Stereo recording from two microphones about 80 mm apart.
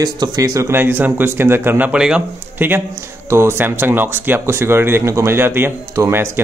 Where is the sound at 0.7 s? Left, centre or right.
Right.